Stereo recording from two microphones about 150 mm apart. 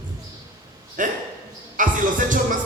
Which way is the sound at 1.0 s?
60° right (ahead or behind).